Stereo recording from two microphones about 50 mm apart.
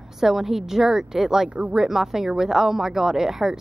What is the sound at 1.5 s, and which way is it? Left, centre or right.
Speech, right.